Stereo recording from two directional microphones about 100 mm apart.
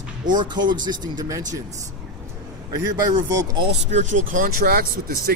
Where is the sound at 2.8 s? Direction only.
35° right (ahead or behind).